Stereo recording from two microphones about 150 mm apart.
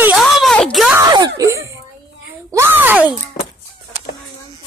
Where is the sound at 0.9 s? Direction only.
25° right (ahead or behind).